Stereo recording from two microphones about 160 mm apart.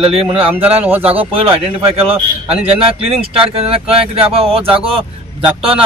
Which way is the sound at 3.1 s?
35° right (ahead or behind).